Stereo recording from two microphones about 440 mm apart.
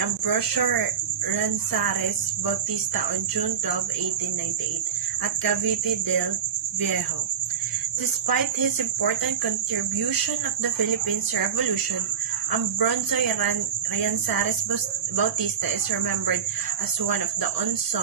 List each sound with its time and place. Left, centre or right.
0.3 s speech: right
5.2 s speech: right
8.3 s speech: right
12.5 s speech: right